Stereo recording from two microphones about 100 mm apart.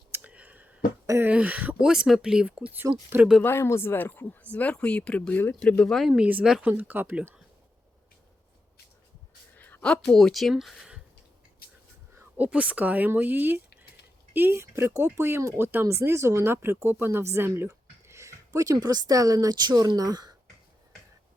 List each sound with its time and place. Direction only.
0.1 s a sound: 15° right (ahead or behind)
1.0 s speech: 30° right (ahead or behind)
1.3 s speech: 15° right (ahead or behind)
3.4 s speech: 25° left (ahead or behind); by 6.1 s 5° left (ahead or behind)
6.1 s speech: 15° right (ahead or behind)
9.6 s speech: 15° left (ahead or behind); by 11.0 s 5° right (ahead or behind)
12.2 s speech: 15° right (ahead or behind); by 20.3 s 40° right (ahead or behind)